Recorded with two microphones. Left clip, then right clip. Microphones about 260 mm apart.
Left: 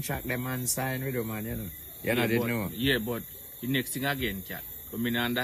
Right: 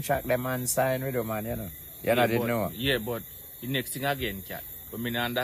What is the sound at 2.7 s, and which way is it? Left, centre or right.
Speech, right.